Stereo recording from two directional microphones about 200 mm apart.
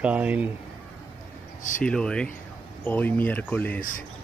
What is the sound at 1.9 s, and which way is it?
Speech, 5° left (ahead or behind).